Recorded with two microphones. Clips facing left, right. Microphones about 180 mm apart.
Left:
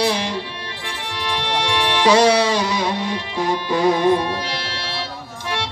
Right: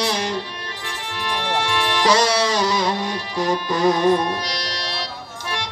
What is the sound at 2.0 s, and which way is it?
Music, 40° right (ahead or behind).